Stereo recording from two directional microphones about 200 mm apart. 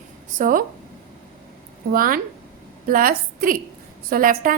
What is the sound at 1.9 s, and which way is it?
A woman's voice, 45° right (ahead or behind).